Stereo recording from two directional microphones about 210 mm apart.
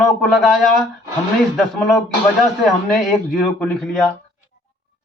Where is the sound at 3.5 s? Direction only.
5° left (ahead or behind).